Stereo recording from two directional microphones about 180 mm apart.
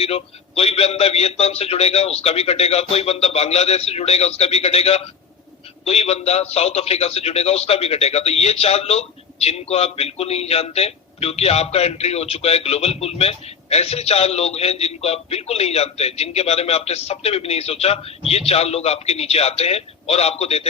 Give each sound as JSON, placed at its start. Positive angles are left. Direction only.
{"t": 0.0, "sound": "a man's voice", "side_deg": 35}